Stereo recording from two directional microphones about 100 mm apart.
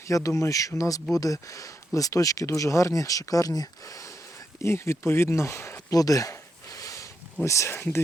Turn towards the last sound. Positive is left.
turn(degrees=25)  # may be behind; listen again after turning